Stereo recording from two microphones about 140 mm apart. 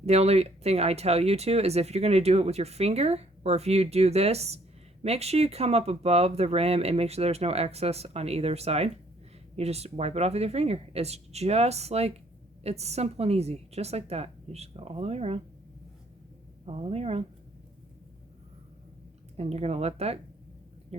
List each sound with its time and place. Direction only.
0.0 s speech: 50° right (ahead or behind)
16.6 s speech: 45° right (ahead or behind)
19.4 s speech: 50° right (ahead or behind)